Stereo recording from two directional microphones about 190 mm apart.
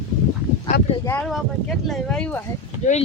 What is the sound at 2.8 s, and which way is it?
Speech, 40° left (ahead or behind).